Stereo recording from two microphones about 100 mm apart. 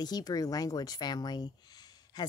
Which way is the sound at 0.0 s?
40° left (ahead or behind).